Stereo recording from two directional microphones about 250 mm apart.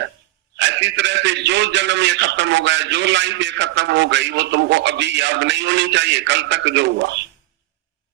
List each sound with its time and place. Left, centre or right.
0.5 s a man's voice: right